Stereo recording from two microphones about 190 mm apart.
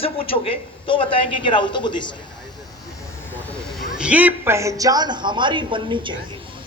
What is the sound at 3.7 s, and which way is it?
A woman's voice, 5° right (ahead or behind).